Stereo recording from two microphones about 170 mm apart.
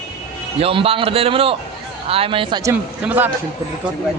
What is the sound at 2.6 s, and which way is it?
Speech, 10° right (ahead or behind).